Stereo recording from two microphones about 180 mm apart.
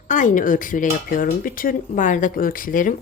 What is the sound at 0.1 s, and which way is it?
Speech, 45° left (ahead or behind).